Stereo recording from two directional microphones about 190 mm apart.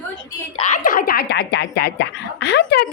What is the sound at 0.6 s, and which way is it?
Speech, 40° left (ahead or behind).